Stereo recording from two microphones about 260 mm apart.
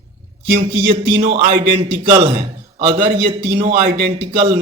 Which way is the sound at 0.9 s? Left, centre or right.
Right.